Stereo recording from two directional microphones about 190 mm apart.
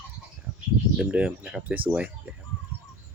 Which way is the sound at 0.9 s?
5° right (ahead or behind).